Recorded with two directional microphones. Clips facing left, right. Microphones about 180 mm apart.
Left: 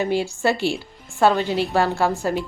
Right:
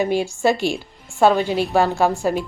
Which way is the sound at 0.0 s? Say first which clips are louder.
Right 2 dB; 15° right (ahead or behind).